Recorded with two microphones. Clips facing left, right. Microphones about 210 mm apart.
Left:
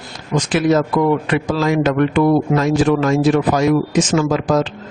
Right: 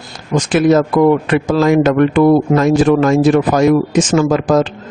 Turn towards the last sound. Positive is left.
turn(degrees=-50)  # may be behind; listen again after turning